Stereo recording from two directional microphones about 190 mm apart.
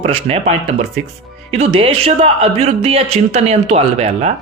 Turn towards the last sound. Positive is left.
turn(degrees=-35)  # may be behind; listen again after turning